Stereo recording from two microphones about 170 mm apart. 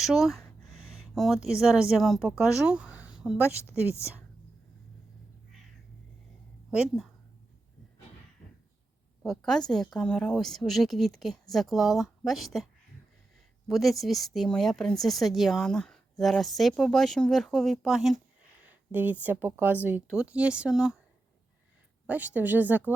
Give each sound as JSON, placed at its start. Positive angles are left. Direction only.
{"t": 0.0, "sound": "speech", "side_deg": 0}
{"t": 2.6, "sound": "a sound", "side_deg": -5}
{"t": 3.4, "sound": "a woman's voice", "side_deg": 15}
{"t": 6.7, "sound": "speech", "side_deg": -5}
{"t": 9.2, "sound": "speech", "side_deg": 0}
{"t": 13.7, "sound": "speech", "side_deg": 0}
{"t": 22.0, "sound": "speech", "side_deg": -10}